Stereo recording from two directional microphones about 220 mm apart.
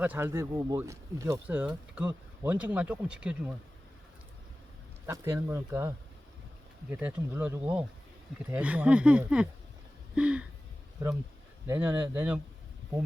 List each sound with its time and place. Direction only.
0.0 s speech: 10° right (ahead or behind)
5.0 s speech: 10° right (ahead or behind)
6.9 s speech: 5° right (ahead or behind)
11.7 s speech: 10° right (ahead or behind)